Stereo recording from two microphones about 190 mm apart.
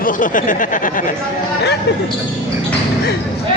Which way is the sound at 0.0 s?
45° left (ahead or behind).